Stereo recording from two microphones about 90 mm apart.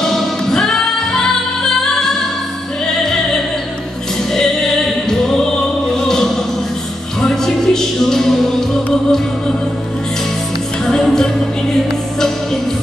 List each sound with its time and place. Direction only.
0.0 s music: 5° left (ahead or behind)
5.9 s music: 5° left (ahead or behind)
10.9 s music: 5° left (ahead or behind)